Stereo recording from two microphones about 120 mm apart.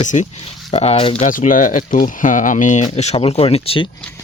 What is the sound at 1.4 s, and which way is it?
Speech, 90° left.